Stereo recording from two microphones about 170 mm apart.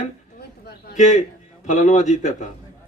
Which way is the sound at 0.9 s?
45° left (ahead or behind).